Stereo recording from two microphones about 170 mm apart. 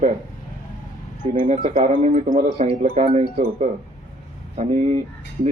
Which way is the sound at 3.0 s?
35° right (ahead or behind).